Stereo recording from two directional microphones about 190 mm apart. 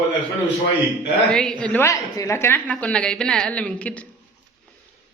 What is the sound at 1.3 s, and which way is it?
Speech, 5° left (ahead or behind).